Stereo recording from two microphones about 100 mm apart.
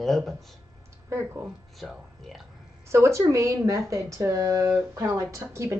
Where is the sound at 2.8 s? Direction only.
30° right (ahead or behind).